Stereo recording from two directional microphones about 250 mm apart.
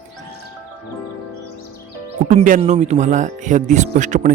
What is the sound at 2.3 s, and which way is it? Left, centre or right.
Speech, right.